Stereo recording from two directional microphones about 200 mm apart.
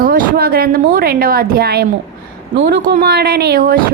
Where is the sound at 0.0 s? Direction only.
45° right (ahead or behind).